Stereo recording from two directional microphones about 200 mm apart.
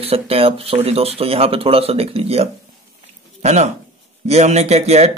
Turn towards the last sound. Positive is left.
turn(degrees=-30)  # may be behind; listen again after turning